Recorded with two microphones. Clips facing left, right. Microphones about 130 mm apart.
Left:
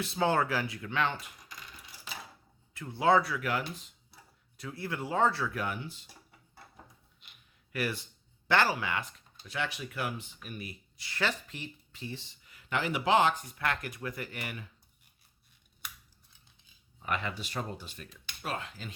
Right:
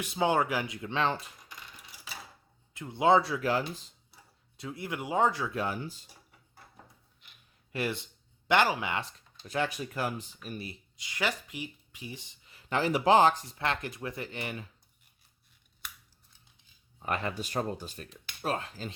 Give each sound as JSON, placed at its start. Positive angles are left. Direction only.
{"t": 0.0, "sound": "speech", "side_deg": -15}
{"t": 2.7, "sound": "speech", "side_deg": -20}
{"t": 7.7, "sound": "speech", "side_deg": -25}
{"t": 9.5, "sound": "speech", "side_deg": -45}
{"t": 10.9, "sound": "speech", "side_deg": -15}
{"t": 12.5, "sound": "speech", "side_deg": -35}
{"t": 17.0, "sound": "speech", "side_deg": -40}